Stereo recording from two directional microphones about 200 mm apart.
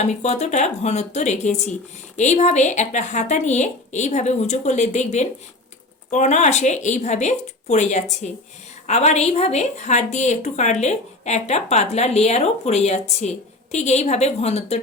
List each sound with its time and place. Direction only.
0.0 s a woman's voice: 35° left (ahead or behind)